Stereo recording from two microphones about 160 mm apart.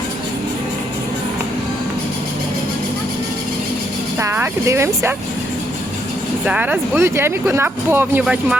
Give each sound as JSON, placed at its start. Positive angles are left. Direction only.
{"t": 4.2, "sound": "speech", "side_deg": -15}
{"t": 6.4, "sound": "speech", "side_deg": -10}